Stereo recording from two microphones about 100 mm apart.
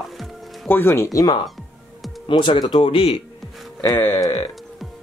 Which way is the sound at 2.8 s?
70° left (ahead or behind).